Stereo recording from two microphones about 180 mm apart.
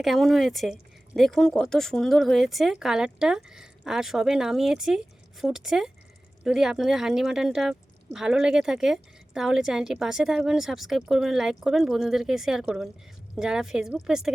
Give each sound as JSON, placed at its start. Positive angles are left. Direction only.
{"t": 0.0, "sound": "speech", "side_deg": 0}